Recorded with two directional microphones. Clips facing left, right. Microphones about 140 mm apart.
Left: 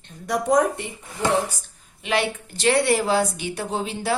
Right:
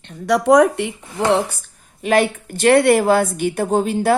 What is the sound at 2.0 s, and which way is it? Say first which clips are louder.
A woman's voice: right 7 dB; 45° right (ahead or behind).